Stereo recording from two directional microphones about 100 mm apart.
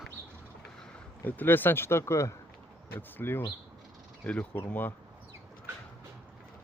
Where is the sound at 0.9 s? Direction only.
20° left (ahead or behind).